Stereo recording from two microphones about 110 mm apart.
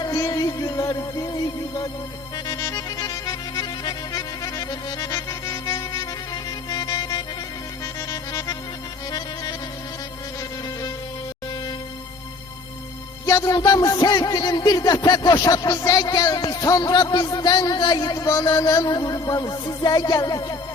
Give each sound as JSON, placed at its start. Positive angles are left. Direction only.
{"t": 0.0, "sound": "music", "side_deg": 35}
{"t": 2.5, "sound": "accordion", "side_deg": 30}
{"t": 8.1, "sound": "music", "side_deg": 35}
{"t": 13.2, "sound": "speech", "side_deg": 35}